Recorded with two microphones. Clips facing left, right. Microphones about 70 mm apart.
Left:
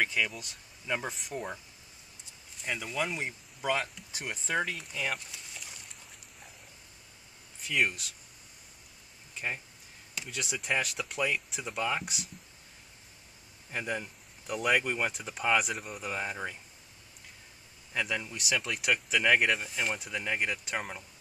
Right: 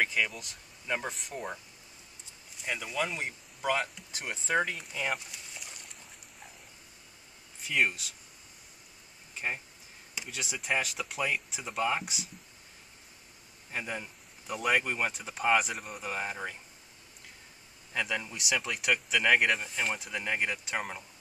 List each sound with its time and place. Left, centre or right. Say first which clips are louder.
0.0 s speech: even; centre
2.6 s speech: even; centre
5.5 s a sound: even; centre
7.6 s speech: right 1 dB; centre
10.1 s speech: left 2 dB; centre
13.7 s speech: left 2 dB; centre
17.9 s speech: even; centre